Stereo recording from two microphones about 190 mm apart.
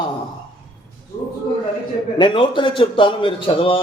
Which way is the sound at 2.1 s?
25° left (ahead or behind).